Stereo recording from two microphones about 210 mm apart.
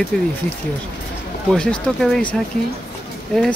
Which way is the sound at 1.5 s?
5° left (ahead or behind).